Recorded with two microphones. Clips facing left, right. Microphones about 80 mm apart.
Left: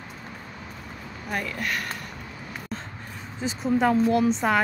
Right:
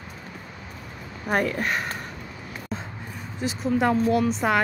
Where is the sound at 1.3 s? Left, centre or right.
Right.